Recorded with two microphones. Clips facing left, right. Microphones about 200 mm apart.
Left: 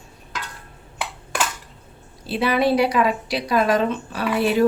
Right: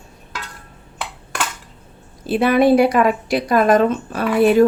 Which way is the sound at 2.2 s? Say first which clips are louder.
Right 6 dB; 50° right (ahead or behind).